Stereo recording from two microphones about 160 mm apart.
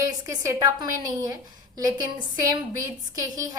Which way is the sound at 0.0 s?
20° right (ahead or behind).